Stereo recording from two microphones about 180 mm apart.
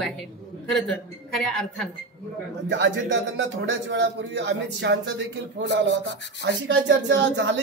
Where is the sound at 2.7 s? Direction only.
90° right.